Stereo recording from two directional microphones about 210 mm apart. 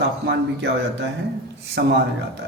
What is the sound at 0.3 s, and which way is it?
Speech, 55° right (ahead or behind).